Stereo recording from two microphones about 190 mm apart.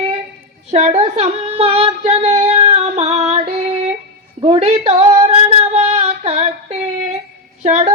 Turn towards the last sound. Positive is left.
turn(degrees=-35)  # may be behind; listen again after turning